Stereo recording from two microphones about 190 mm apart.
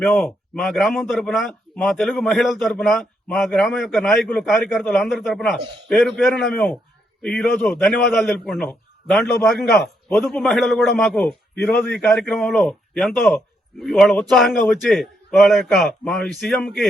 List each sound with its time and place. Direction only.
0.0 s a man's voice: centre (ahead or behind)